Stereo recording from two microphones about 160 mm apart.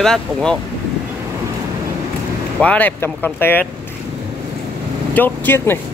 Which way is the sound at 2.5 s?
10° left (ahead or behind).